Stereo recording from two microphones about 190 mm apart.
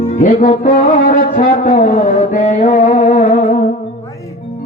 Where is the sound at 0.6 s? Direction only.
45° left (ahead or behind).